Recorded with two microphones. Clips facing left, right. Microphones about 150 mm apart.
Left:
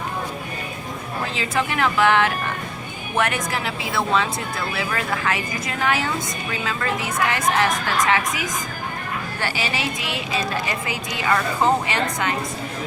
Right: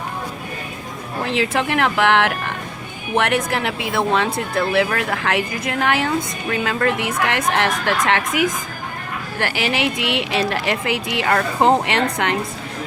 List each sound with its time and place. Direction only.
1.2 s a woman's voice: 70° right (ahead or behind)